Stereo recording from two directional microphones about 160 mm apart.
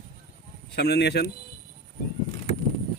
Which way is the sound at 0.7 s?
90° left.